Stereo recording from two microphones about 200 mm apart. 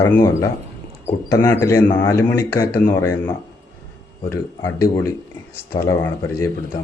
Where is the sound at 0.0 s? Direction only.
15° left (ahead or behind).